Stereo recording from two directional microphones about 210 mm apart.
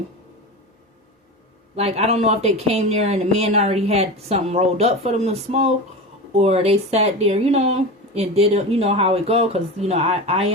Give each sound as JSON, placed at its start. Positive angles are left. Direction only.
{"t": 1.7, "sound": "speech", "side_deg": -30}